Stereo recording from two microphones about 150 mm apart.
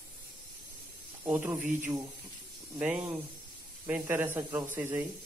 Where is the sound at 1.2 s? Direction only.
15° right (ahead or behind).